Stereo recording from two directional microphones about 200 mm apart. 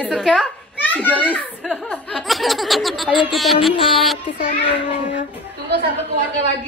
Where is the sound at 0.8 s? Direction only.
10° left (ahead or behind).